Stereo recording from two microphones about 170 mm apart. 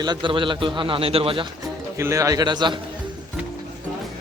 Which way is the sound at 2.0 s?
20° right (ahead or behind).